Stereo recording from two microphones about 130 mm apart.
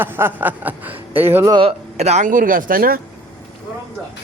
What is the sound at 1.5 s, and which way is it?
Speech, 45° right (ahead or behind).